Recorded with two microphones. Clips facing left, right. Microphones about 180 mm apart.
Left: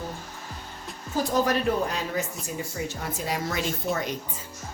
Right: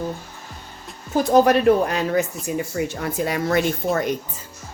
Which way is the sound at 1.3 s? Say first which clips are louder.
Right 10 dB; 65° right (ahead or behind).